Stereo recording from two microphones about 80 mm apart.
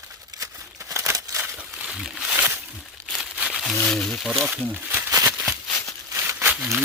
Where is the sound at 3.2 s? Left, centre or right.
Centre.